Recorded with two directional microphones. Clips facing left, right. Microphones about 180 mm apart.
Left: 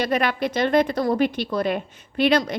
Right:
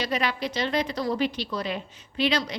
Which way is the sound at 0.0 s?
55° left (ahead or behind).